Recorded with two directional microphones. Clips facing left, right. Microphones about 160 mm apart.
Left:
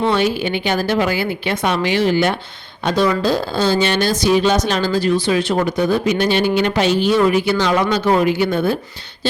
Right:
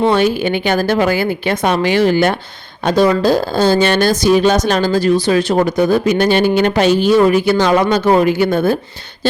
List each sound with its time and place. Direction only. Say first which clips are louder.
0.1 s speech: right 4 dB; 45° right (ahead or behind)